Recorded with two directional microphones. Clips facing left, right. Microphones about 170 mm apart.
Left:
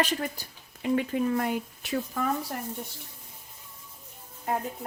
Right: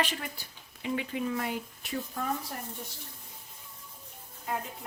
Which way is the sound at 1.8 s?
90° left.